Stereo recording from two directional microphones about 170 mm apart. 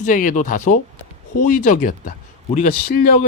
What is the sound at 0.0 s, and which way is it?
Speech, 50° left (ahead or behind).